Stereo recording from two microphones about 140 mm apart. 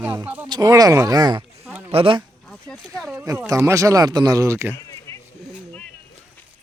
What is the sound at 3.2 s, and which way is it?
Speech, 25° right (ahead or behind).